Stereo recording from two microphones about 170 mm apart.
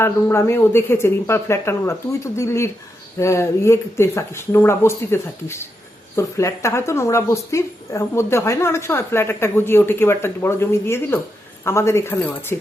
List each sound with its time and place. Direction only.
0.0 s a woman's voice: 15° left (ahead or behind)